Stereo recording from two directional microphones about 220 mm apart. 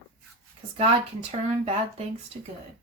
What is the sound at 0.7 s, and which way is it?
Speech, 25° right (ahead or behind).